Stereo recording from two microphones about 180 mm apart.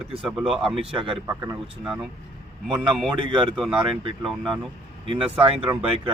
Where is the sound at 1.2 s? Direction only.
15° right (ahead or behind).